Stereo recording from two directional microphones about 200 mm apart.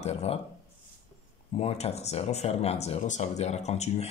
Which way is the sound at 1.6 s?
30° left (ahead or behind).